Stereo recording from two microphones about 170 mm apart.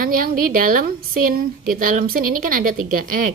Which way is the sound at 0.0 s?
55° right (ahead or behind).